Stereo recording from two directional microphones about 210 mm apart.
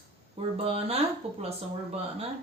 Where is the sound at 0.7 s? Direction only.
30° right (ahead or behind).